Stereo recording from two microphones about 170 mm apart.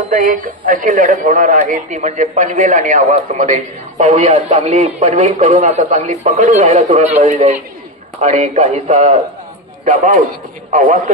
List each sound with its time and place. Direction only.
0.1 s a man's voice: 55° right (ahead or behind)